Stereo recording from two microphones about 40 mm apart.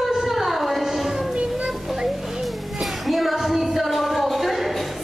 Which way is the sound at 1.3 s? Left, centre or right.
Right.